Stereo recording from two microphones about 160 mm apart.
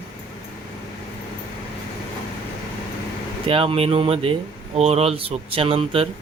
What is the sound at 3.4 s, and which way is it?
Speech, 35° right (ahead or behind).